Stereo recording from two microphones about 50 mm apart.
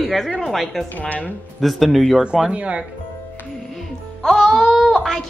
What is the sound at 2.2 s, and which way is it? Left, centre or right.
Speech, centre.